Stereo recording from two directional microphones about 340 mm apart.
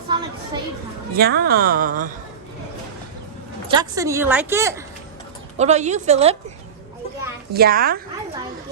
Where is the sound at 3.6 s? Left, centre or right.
Centre.